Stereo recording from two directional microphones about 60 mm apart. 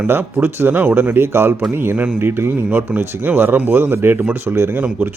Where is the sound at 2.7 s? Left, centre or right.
Right.